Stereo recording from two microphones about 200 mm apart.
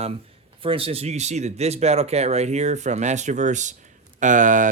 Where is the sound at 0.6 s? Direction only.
25° right (ahead or behind).